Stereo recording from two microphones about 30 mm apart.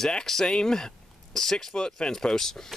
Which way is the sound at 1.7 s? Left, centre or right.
Left.